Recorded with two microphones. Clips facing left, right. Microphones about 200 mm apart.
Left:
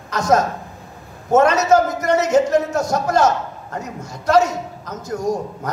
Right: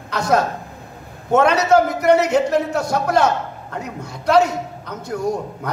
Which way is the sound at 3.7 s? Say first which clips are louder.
Even; 60° right (ahead or behind).